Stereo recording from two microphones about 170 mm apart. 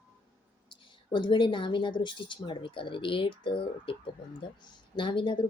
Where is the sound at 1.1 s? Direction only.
30° left (ahead or behind).